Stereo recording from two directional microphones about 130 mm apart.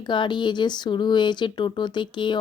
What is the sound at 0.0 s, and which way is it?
Speech, 35° left (ahead or behind).